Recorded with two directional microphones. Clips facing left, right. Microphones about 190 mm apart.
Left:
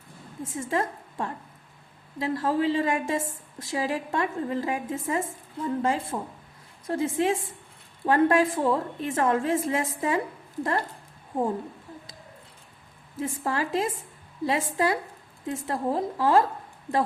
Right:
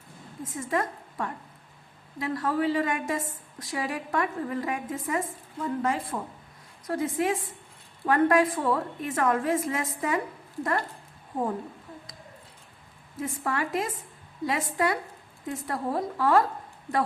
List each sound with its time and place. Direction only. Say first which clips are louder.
0.4 s a woman's voice: left 1 dB; 30° left (ahead or behind)
13.1 s a woman's voice: left 2 dB; 30° left (ahead or behind)